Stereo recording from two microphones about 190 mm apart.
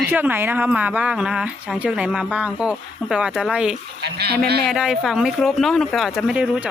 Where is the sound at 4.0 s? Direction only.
60° right (ahead or behind).